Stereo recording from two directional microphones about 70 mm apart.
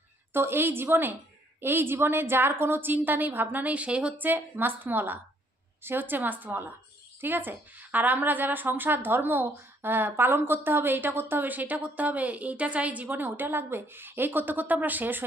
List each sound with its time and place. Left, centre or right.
0.3 s a woman's voice: right